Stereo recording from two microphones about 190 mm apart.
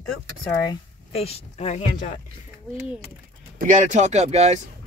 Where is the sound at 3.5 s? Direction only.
45° right (ahead or behind).